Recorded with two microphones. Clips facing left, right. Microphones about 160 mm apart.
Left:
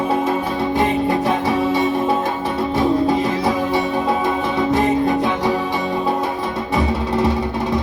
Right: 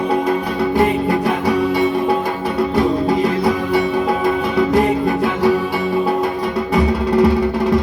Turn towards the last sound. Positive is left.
turn(degrees=20)  # may be behind; listen again after turning